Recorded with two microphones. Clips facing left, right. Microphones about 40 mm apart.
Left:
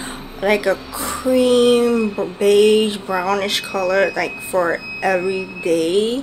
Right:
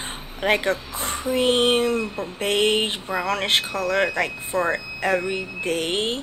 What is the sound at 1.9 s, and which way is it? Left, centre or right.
Speech, left.